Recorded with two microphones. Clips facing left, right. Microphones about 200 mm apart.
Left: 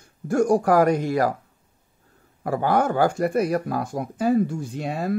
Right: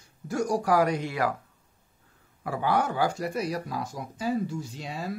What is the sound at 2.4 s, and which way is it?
Speech, 45° left (ahead or behind).